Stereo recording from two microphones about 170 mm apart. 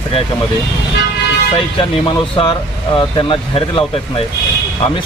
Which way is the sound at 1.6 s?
30° left (ahead or behind).